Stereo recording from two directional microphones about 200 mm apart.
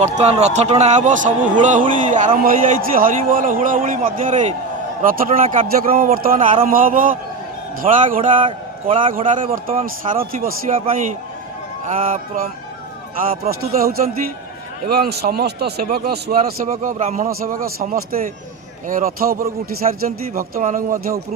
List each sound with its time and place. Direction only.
0.0 s a man's voice: 35° right (ahead or behind)
8.4 s a man's voice: 25° right (ahead or behind)
9.1 s a man's voice: 40° right (ahead or behind)
13.5 s a man's voice: 50° right (ahead or behind)